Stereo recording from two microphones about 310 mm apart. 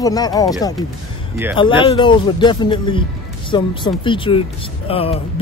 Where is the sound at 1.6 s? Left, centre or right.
Centre.